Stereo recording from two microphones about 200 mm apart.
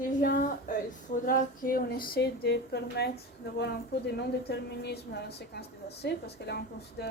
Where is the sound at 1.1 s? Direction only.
45° left (ahead or behind).